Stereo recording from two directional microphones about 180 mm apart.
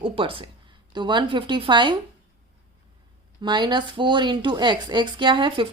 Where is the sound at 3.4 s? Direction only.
25° right (ahead or behind).